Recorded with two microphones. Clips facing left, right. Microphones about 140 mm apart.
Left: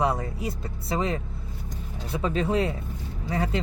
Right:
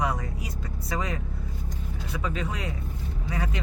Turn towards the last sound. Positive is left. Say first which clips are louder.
# left 5 dB
turn(degrees=30)  # may be behind; listen again after turning